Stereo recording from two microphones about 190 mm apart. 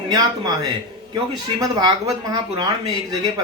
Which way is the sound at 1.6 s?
20° right (ahead or behind).